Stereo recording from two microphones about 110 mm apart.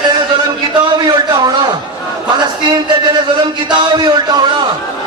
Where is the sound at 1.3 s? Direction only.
40° right (ahead or behind).